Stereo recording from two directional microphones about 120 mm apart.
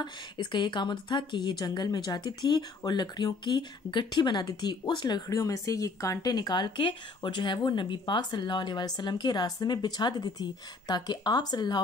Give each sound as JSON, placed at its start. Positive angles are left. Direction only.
{"t": 0.0, "sound": "a woman's voice", "side_deg": 40}